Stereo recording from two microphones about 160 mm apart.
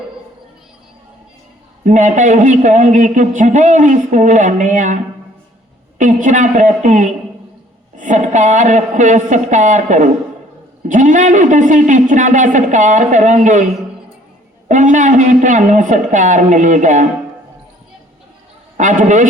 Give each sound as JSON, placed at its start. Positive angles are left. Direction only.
{"t": 1.8, "sound": "a man's voice", "side_deg": -50}
{"t": 6.0, "sound": "a man's voice", "side_deg": -50}
{"t": 18.8, "sound": "a man's voice", "side_deg": -50}